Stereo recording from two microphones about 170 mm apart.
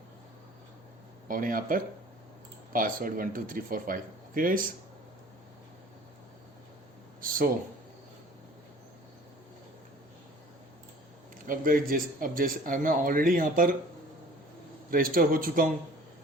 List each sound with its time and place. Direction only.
1.3 s speech: 55° right (ahead or behind)
11.4 s speech: 55° right (ahead or behind)
14.8 s speech: 55° right (ahead or behind)